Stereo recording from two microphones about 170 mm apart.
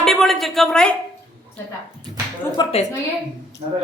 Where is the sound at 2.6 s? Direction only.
25° left (ahead or behind).